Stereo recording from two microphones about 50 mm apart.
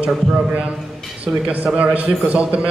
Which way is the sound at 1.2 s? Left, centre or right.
Right.